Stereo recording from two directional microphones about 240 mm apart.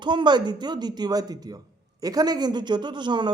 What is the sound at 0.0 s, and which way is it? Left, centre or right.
Speech, centre.